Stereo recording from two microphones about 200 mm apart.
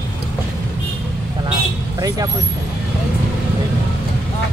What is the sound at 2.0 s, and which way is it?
Vehicle, 20° right (ahead or behind).